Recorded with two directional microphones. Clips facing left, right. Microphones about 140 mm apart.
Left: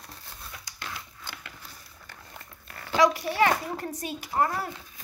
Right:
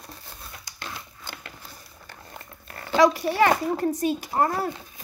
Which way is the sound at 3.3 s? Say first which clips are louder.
Right 4 dB; 35° right (ahead or behind).